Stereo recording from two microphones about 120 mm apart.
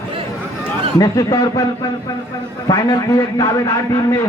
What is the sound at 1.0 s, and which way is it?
Speech, 30° left (ahead or behind).